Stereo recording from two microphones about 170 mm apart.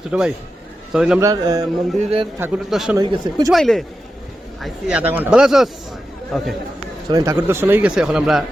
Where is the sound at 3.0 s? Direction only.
20° right (ahead or behind).